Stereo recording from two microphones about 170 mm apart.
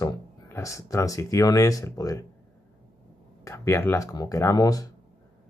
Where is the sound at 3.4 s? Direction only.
15° left (ahead or behind).